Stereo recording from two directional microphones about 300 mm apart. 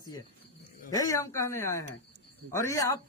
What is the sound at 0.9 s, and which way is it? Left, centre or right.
Speech, centre.